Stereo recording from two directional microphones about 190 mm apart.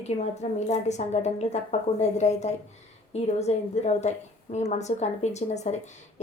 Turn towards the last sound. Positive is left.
turn(degrees=35)  # may be behind; listen again after turning